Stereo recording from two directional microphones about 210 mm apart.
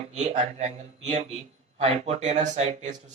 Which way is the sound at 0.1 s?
35° right (ahead or behind).